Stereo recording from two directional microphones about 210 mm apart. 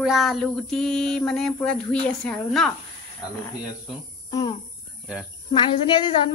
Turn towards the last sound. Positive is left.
turn(degrees=20)  # may be behind; listen again after turning